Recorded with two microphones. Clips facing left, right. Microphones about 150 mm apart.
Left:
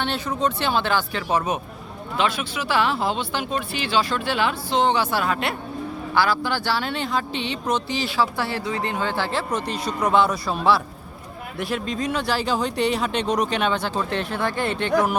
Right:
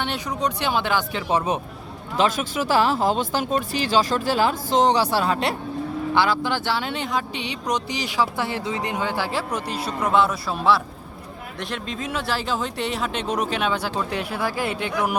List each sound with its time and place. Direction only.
0.0 s speech: 15° right (ahead or behind)
1.3 s speech: 25° right (ahead or behind)
2.1 s speech: 40° right (ahead or behind)
6.1 s speech: 20° right (ahead or behind)